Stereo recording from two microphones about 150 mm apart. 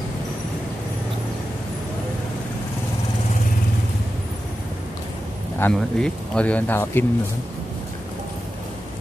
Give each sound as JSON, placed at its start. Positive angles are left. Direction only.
{"t": 5.6, "sound": "speech", "side_deg": 5}